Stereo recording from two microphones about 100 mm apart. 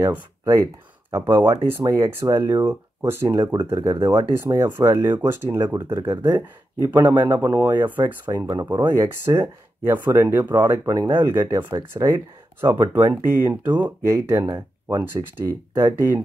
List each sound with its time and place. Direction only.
1.1 s speech: 25° right (ahead or behind)
7.1 s speech: 20° right (ahead or behind)
8.3 s speech: 35° right (ahead or behind)